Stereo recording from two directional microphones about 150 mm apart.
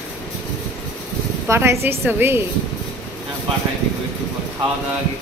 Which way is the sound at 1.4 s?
15° right (ahead or behind).